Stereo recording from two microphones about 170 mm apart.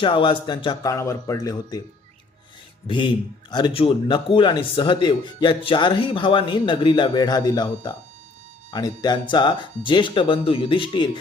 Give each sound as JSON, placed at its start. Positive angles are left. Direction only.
{"t": 0.0, "sound": "speech", "side_deg": 30}
{"t": 2.8, "sound": "speech", "side_deg": 30}